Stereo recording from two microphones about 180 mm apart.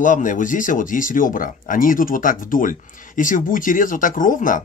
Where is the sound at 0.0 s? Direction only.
45° left (ahead or behind).